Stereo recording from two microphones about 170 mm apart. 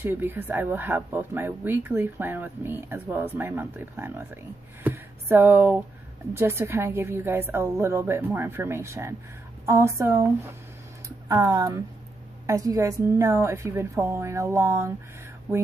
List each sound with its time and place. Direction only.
0.0 s speech: 10° right (ahead or behind)